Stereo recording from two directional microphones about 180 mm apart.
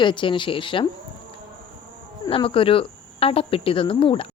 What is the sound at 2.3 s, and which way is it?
A woman's voice, 30° left (ahead or behind).